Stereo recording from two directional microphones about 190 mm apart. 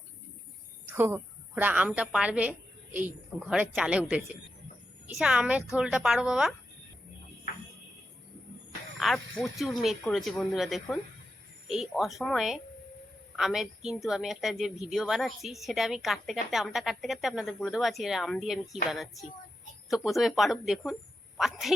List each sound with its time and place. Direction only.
0.9 s a woman's voice: 10° right (ahead or behind)
9.0 s a woman's voice: centre (ahead or behind)